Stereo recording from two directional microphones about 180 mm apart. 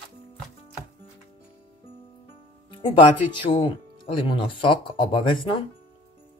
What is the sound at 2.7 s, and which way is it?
Speech, 25° left (ahead or behind).